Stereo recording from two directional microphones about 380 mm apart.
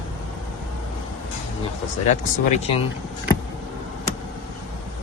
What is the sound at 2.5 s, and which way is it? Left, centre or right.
Speech, centre.